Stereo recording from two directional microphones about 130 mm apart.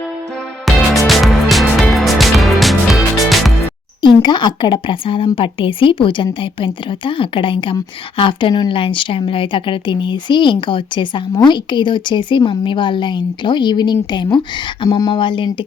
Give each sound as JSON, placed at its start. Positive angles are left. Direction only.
{"t": 0.6, "sound": "music", "side_deg": 0}
{"t": 4.0, "sound": "a woman's voice", "side_deg": 35}